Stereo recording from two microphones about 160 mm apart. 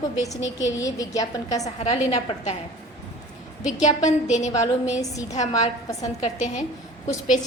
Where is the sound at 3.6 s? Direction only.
50° left (ahead or behind).